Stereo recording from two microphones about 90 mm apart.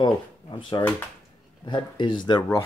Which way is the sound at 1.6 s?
60° left (ahead or behind).